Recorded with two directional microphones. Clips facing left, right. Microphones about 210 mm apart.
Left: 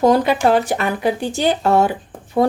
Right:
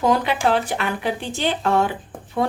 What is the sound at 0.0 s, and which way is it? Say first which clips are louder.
A woman's voice: left 5 dB; 40° left (ahead or behind).